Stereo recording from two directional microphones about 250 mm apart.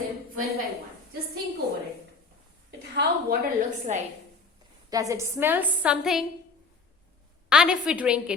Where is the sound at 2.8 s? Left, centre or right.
Right.